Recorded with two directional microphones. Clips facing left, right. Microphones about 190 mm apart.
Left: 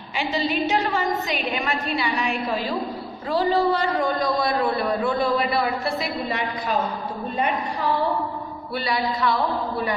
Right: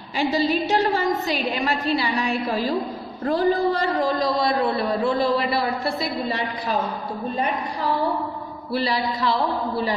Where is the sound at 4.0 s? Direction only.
25° right (ahead or behind).